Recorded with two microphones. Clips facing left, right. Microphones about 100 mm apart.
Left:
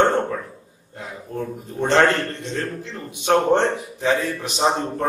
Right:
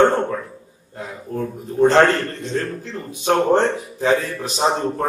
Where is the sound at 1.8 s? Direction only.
35° right (ahead or behind).